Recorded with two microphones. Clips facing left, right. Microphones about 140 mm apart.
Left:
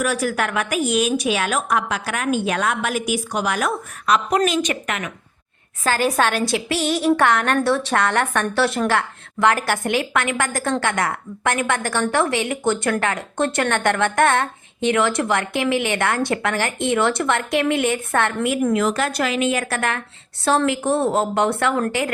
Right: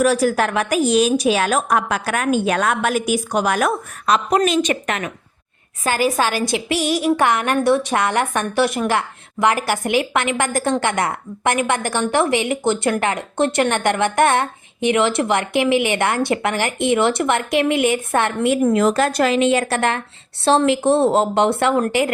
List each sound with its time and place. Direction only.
0.0 s a woman's voice: 35° right (ahead or behind)
4.1 s speech: 25° right (ahead or behind)
5.8 s a woman's voice: 15° right (ahead or behind)
6.1 s a woman's voice: 5° right (ahead or behind); by 22.1 s 20° right (ahead or behind)